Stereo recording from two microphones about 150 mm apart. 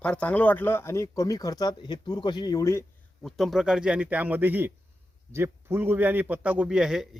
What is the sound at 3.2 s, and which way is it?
A man's voice, centre (ahead or behind).